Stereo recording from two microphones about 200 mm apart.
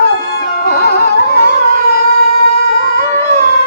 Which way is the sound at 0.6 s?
50° left (ahead or behind).